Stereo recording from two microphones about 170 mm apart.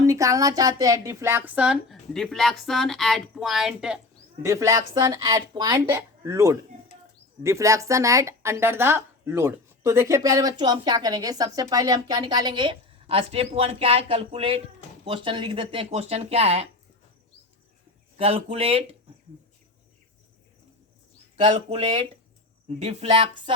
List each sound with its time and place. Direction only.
0.0 s speech: 20° right (ahead or behind); by 4.0 s 5° right (ahead or behind)
4.4 s speech: 15° right (ahead or behind); by 16.6 s 35° right (ahead or behind)
18.2 s speech: 35° right (ahead or behind)
21.5 s speech: 40° right (ahead or behind)